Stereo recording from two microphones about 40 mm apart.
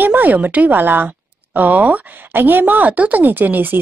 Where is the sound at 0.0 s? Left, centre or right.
Right.